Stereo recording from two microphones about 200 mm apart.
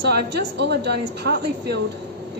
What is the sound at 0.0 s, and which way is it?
Speech, 60° right (ahead or behind).